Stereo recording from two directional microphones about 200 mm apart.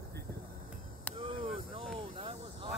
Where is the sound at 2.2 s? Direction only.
25° right (ahead or behind).